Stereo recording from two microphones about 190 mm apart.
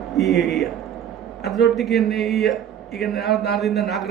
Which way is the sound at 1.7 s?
Centre (ahead or behind).